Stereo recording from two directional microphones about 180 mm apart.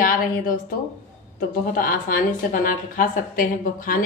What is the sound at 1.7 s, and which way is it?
A woman's voice, 50° left (ahead or behind).